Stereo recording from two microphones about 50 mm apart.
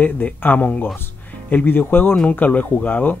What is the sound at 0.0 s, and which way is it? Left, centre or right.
Speech, left.